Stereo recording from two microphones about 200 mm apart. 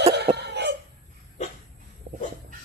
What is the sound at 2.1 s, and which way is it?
Dog, 60° right (ahead or behind).